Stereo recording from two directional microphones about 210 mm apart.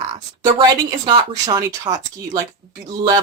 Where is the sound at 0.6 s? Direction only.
20° right (ahead or behind).